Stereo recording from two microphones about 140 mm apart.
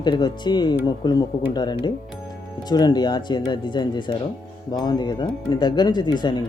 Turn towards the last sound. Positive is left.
turn(degrees=30)  # may be behind; listen again after turning